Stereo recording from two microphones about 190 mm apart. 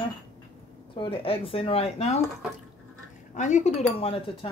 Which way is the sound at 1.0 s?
30° left (ahead or behind).